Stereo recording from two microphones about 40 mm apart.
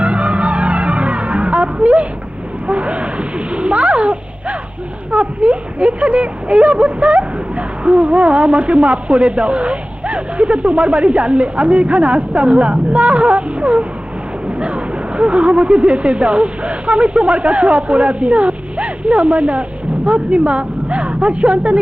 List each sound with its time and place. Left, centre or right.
0.0 s music: right
2.6 s a sound: right
5.1 s speech: right